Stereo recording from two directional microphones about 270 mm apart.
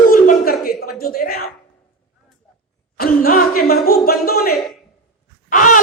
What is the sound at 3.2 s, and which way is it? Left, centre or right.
Speech, left.